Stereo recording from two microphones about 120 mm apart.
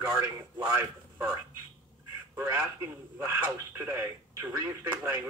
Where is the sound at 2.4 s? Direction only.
15° right (ahead or behind).